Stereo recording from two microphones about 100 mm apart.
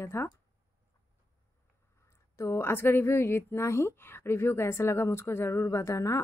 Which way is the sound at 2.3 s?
25° left (ahead or behind).